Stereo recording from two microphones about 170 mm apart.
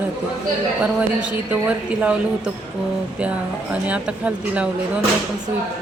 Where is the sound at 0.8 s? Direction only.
5° right (ahead or behind).